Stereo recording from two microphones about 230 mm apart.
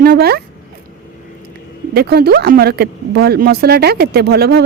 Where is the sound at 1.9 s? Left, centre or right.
Right.